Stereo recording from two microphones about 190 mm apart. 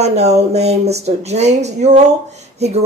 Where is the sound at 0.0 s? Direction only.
35° right (ahead or behind).